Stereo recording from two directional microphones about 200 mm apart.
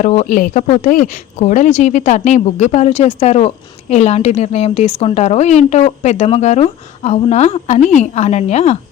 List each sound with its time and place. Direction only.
0.0 s speech: 40° left (ahead or behind)